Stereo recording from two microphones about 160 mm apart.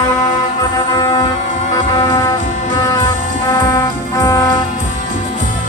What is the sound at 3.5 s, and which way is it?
Music, 20° left (ahead or behind).